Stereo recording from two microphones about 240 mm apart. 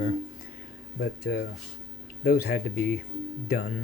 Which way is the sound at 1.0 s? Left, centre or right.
Left.